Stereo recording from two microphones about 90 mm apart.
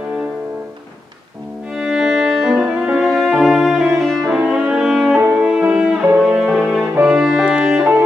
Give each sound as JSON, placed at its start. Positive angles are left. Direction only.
{"t": 1.8, "sound": "music", "side_deg": -5}
{"t": 4.4, "sound": "music", "side_deg": -10}
{"t": 5.1, "sound": "music", "side_deg": -20}
{"t": 7.7, "sound": "music", "side_deg": -25}